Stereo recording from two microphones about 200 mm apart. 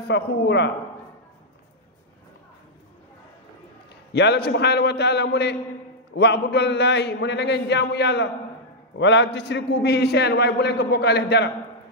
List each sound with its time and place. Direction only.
0.1 s a man's voice: 55° left (ahead or behind)
4.1 s a man's voice: 55° left (ahead or behind)